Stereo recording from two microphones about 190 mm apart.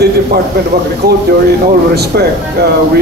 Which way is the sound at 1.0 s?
60° right (ahead or behind).